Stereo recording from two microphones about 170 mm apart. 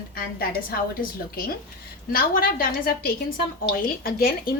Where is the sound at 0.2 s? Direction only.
60° left (ahead or behind).